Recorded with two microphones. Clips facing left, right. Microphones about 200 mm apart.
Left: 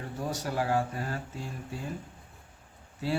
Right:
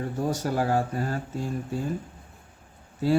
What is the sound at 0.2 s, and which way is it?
Speech, 45° right (ahead or behind).